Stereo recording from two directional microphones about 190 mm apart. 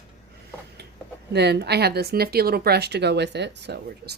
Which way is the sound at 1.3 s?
60° right (ahead or behind).